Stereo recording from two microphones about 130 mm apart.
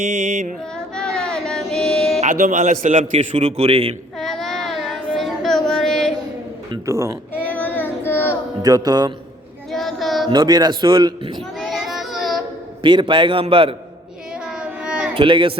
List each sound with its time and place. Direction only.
0.0 s music: 60° right (ahead or behind)
0.9 s child singing: 5° left (ahead or behind)
2.2 s a man's voice: 70° right (ahead or behind)
3.0 s a man's voice: 50° right (ahead or behind)
4.2 s child singing: 5° left (ahead or behind)
6.8 s speech: 20° right (ahead or behind)
7.4 s child singing: 15° left (ahead or behind)
8.6 s speech: 30° right (ahead or behind)
9.7 s child singing: centre (ahead or behind)
10.2 s speech: 35° right (ahead or behind)
11.3 s child singing: centre (ahead or behind)
12.8 s speech: 40° right (ahead or behind)
14.4 s child singing: 5° right (ahead or behind)
15.1 s speech: 40° right (ahead or behind)